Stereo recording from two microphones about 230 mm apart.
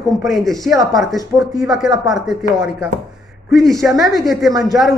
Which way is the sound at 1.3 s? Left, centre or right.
Centre.